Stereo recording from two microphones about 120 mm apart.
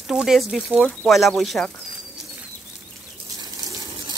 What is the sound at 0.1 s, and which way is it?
Speech, 5° right (ahead or behind).